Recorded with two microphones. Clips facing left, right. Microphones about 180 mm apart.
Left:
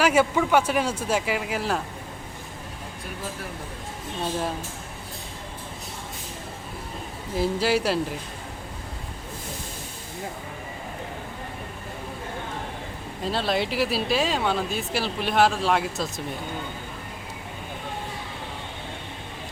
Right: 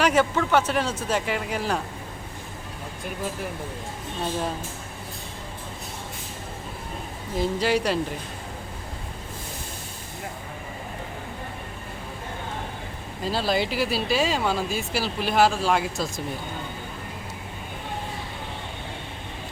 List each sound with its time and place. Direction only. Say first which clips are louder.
0.0 s speech: left 1 dB; 10° left (ahead or behind)
7.3 s speech: even; 5° left (ahead or behind)
13.2 s speech: right 1 dB; centre (ahead or behind)